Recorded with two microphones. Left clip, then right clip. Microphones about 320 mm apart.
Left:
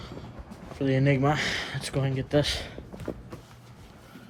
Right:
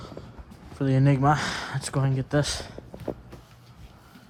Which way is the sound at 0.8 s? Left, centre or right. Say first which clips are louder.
Even; centre.